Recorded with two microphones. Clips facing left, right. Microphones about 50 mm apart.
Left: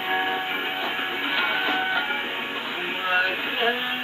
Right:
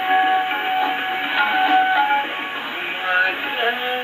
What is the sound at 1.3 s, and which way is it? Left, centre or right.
Music, centre.